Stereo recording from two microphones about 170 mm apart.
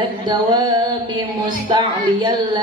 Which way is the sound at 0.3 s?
25° right (ahead or behind).